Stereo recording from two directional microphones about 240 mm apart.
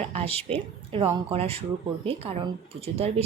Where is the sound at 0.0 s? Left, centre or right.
Right.